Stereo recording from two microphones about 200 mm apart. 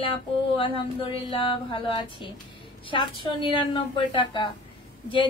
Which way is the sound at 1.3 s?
25° left (ahead or behind).